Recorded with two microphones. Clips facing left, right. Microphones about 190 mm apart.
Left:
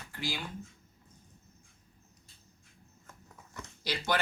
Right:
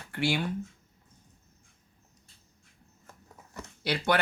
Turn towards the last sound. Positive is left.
turn(degrees=-60)  # may be behind; listen again after turning